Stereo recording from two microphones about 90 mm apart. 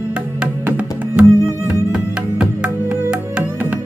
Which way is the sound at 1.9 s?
10° right (ahead or behind).